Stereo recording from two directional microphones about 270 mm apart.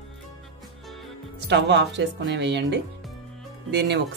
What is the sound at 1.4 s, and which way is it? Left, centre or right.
Speech, right.